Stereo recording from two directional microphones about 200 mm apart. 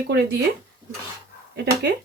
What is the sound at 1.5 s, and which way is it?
Speech, 55° right (ahead or behind).